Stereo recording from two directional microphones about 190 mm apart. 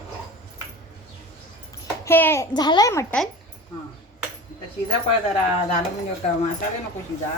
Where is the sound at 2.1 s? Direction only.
10° left (ahead or behind).